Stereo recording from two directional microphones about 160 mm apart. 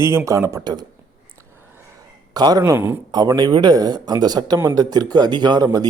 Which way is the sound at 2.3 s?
25° right (ahead or behind).